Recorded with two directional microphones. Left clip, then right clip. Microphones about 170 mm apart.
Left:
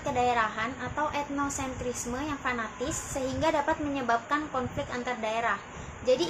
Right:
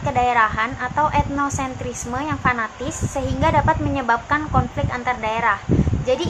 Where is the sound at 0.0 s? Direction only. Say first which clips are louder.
Right 9 dB; 10° right (ahead or behind).